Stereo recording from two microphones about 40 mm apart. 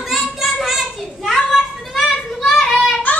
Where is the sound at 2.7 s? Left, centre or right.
Centre.